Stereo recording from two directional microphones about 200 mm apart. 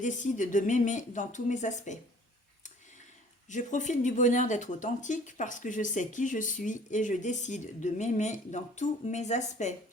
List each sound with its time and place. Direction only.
0.0 s speech: 40° left (ahead or behind)
3.5 s speech: 40° left (ahead or behind)